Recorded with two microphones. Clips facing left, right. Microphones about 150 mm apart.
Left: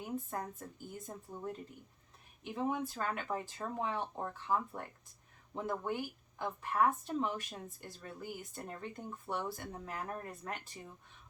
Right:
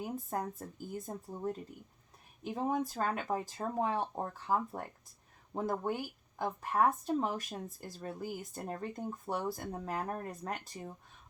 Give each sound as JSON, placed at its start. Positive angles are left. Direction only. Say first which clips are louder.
{"t": 0.0, "sound": "a woman's voice", "louder": "right 3 dB", "side_deg": -40}